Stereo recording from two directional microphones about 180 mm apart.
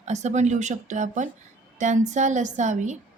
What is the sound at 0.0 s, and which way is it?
A woman's voice, 40° right (ahead or behind).